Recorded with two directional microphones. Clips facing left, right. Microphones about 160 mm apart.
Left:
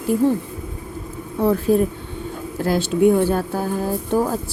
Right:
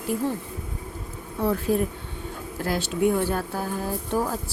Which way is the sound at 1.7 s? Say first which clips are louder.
Left 6 dB; 30° left (ahead or behind).